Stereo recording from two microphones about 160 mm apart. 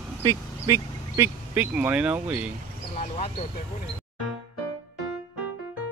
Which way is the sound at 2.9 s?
40° left (ahead or behind).